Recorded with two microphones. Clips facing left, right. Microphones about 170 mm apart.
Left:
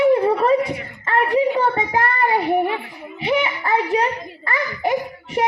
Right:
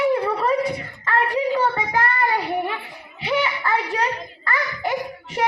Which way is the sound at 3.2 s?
20° left (ahead or behind).